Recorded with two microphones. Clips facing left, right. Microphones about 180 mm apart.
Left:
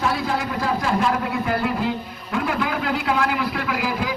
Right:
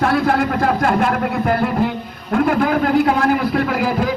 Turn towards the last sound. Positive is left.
turn(degrees=-50)  # may be behind; listen again after turning